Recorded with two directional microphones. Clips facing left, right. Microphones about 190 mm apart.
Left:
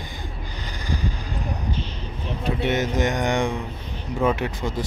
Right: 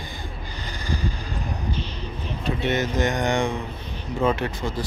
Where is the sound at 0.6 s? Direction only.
15° left (ahead or behind).